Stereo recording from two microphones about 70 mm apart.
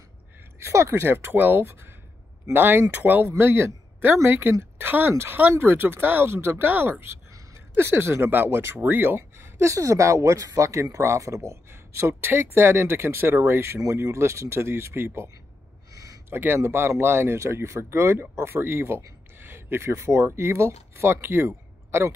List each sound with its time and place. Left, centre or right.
0.6 s speech: right
15.9 s a sound: right
16.3 s speech: right